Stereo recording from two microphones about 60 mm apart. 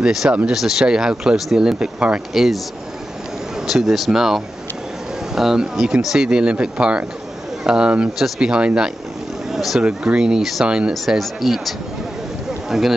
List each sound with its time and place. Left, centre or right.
0.0 s speech: centre
2.3 s speech: centre
3.6 s speech: centre
9.5 s a sound: centre
9.8 s speech: centre
10.9 s speech: centre
12.4 s a sound: centre